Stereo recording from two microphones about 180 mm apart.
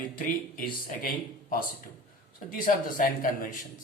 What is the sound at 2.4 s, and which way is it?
Speech, 50° left (ahead or behind).